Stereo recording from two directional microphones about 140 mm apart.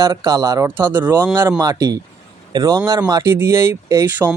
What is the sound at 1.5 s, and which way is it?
Speech, 25° right (ahead or behind).